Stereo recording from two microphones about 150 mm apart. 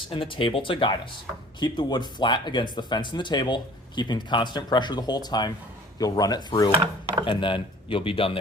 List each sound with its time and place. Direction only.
0.1 s speech: 35° left (ahead or behind)